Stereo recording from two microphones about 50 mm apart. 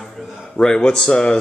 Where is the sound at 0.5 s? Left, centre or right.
Centre.